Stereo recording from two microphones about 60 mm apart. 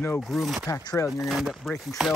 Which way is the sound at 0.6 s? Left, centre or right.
Left.